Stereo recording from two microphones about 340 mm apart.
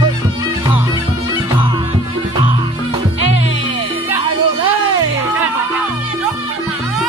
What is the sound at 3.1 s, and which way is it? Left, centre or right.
Music, left.